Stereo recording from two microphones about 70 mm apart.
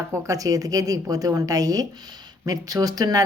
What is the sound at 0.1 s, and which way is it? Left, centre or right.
A woman's voice, right.